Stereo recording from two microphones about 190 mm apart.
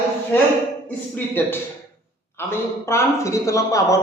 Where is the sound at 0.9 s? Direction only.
10° left (ahead or behind).